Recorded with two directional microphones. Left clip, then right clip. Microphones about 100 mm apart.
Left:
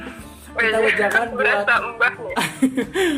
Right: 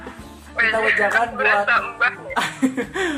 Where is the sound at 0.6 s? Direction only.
40° left (ahead or behind).